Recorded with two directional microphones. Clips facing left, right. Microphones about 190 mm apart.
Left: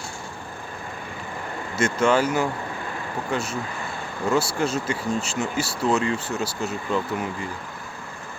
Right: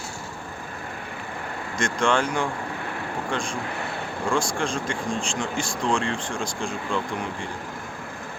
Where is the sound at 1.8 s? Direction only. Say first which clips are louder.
Left 3 dB; 5° left (ahead or behind).